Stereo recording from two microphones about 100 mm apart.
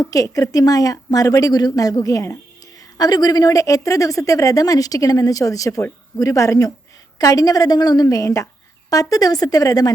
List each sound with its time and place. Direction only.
0.0 s speech: 35° left (ahead or behind)